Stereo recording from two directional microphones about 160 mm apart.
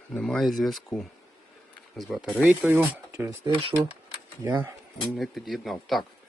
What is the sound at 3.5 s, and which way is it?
Speech, 30° right (ahead or behind).